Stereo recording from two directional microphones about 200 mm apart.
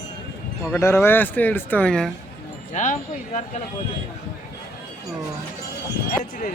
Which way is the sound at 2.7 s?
40° left (ahead or behind).